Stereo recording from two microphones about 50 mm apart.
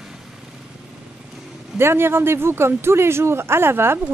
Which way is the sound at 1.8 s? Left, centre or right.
Right.